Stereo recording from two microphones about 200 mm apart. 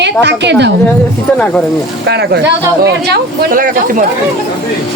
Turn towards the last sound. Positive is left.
turn(degrees=-45)  # may be behind; listen again after turning